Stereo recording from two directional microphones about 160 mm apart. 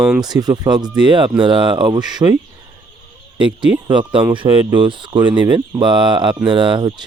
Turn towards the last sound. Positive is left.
turn(degrees=-30)  # may be behind; listen again after turning